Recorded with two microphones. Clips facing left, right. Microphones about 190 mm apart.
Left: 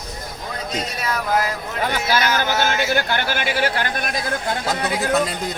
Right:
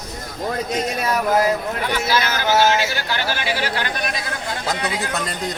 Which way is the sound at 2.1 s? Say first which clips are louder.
Right 1 dB; 50° left (ahead or behind).